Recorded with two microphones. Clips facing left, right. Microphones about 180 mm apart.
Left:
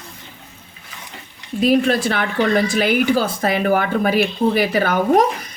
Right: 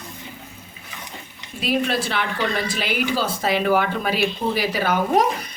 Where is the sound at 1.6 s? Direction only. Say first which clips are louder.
Left 7 dB; 50° left (ahead or behind).